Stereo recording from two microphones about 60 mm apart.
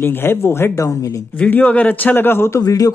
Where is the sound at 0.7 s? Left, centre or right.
Left.